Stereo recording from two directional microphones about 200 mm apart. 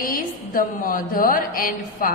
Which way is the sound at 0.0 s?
45° left (ahead or behind).